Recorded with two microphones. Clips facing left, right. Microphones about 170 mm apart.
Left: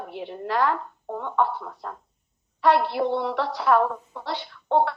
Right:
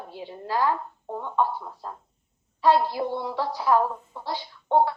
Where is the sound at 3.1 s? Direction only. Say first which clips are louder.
Left 3 dB; 75° left (ahead or behind).